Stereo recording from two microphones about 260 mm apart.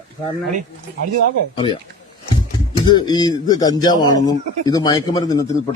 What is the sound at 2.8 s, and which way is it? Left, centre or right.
A man's voice, centre.